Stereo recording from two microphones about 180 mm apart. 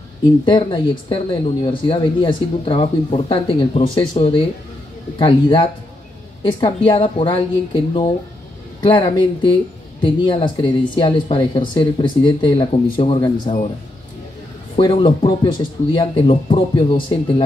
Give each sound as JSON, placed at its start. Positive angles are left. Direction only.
{"t": 0.5, "sound": "speech", "side_deg": 30}
{"t": 14.8, "sound": "speech", "side_deg": 25}